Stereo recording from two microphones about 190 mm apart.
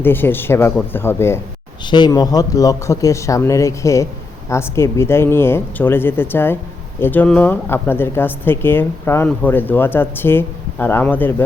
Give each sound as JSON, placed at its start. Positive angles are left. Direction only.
{"t": 0.0, "sound": "speech", "side_deg": 10}
{"t": 1.8, "sound": "speech", "side_deg": 25}